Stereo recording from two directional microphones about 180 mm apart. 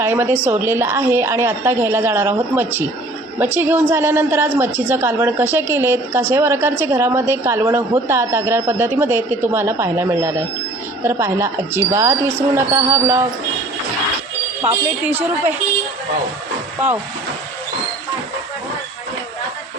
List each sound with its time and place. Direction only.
0.0 s a woman's voice: 10° right (ahead or behind)
14.6 s a woman's voice: 10° right (ahead or behind)